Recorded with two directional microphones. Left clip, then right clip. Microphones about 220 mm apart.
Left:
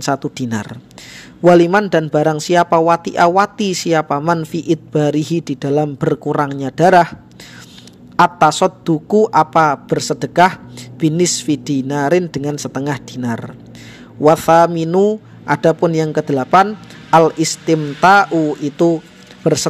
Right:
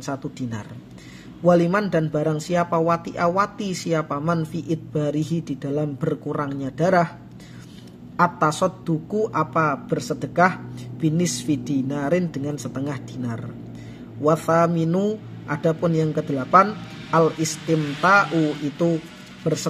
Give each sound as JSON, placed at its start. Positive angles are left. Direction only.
{"t": 0.0, "sound": "a man's voice", "side_deg": 40}
{"t": 8.2, "sound": "a man's voice", "side_deg": 40}